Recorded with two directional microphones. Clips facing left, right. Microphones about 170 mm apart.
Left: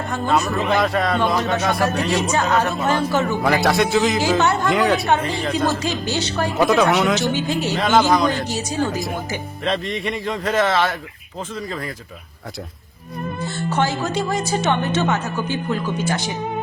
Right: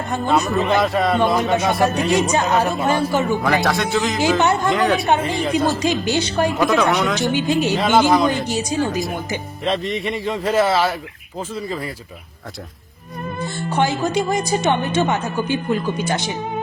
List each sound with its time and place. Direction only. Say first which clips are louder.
0.3 s a man's voice: right 2 dB; centre (ahead or behind)
1.3 s speech: right 2 dB; 10° right (ahead or behind)
3.4 s a man's voice: left 1 dB; 5° left (ahead or behind)
4.2 s speech: right 1 dB; 15° right (ahead or behind)
4.7 s a man's voice: even; 5° left (ahead or behind)
5.4 s speech: right 2 dB; 10° right (ahead or behind)
6.7 s a man's voice: left 1 dB; 10° left (ahead or behind)
7.2 s speech: right 3 dB; 15° right (ahead or behind)
7.8 s a man's voice: left 2 dB; 5° right (ahead or behind)
8.4 s speech: right 2 dB; 15° right (ahead or behind)
9.6 s a man's voice: right 1 dB; centre (ahead or behind)
13.4 s speech: right 1 dB; 15° right (ahead or behind)